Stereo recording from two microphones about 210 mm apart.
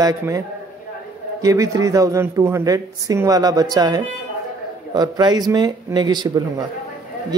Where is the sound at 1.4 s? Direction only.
15° right (ahead or behind).